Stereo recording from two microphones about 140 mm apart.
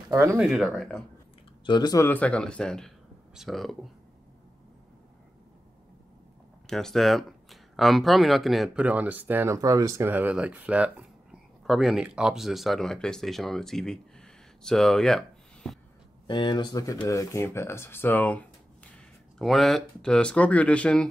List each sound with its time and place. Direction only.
0.1 s speech: 20° right (ahead or behind)
0.4 s speech: centre (ahead or behind)
1.7 s speech: 30° left (ahead or behind)
2.0 s speech: 10° left (ahead or behind)
6.7 s speech: 5° left (ahead or behind)
16.3 s speech: 35° left (ahead or behind); by 21.1 s 10° left (ahead or behind)